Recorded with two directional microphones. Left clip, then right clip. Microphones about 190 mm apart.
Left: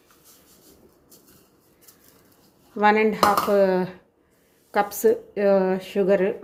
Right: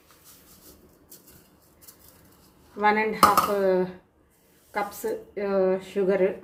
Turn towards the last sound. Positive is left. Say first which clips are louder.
# left 3 dB
turn(degrees=50)  # may be behind; listen again after turning